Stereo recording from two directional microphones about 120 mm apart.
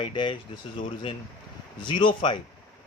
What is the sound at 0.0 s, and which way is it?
Speech, 45° left (ahead or behind).